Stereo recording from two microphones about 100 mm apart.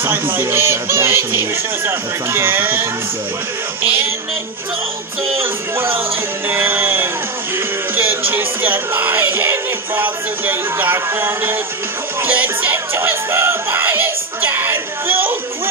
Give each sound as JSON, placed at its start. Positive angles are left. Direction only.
{"t": 0.0, "sound": "music", "side_deg": -20}
{"t": 5.4, "sound": "music", "side_deg": -25}